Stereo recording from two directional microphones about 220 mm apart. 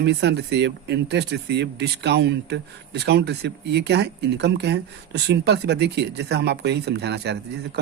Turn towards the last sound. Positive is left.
turn(degrees=-50)  # may be behind; listen again after turning